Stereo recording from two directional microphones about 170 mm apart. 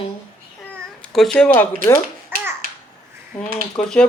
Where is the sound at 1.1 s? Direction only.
Centre (ahead or behind).